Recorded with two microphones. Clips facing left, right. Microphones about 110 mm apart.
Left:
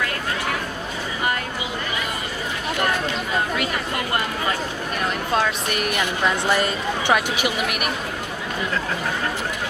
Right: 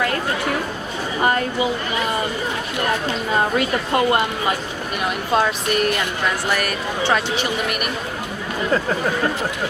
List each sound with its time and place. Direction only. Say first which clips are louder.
3.6 s a woman's voice: right 6 dB; 25° right (ahead or behind)
6.5 s speech: left 1 dB; 20° left (ahead or behind)